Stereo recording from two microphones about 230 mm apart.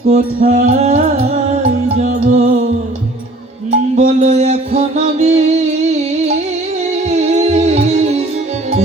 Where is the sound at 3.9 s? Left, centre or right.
Right.